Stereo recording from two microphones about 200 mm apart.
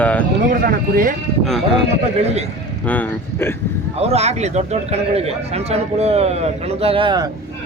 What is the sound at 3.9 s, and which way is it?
Speech, 30° right (ahead or behind).